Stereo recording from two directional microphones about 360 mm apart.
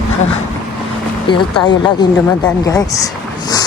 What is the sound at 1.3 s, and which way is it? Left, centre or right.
Speech, centre.